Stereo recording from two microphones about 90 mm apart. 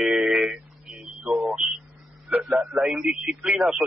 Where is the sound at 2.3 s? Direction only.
10° right (ahead or behind).